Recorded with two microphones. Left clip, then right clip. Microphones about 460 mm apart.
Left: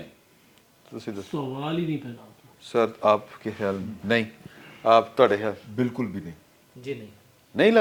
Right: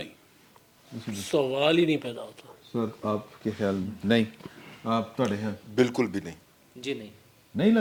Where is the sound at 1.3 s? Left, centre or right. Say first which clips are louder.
Right 9 dB; right.